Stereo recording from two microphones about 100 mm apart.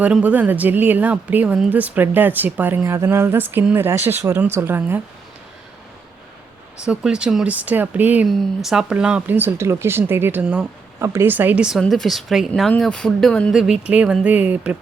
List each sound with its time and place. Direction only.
0.0 s a woman's voice: 15° right (ahead or behind)
6.8 s speech: 10° right (ahead or behind)
8.3 s a woman's voice: centre (ahead or behind); by 10.4 s 20° right (ahead or behind)
10.4 s speech: 5° right (ahead or behind)
11.0 s a woman's voice: 25° right (ahead or behind); by 11.8 s 10° right (ahead or behind)
11.8 s speech: 5° left (ahead or behind)
13.5 s speech: 5° right (ahead or behind)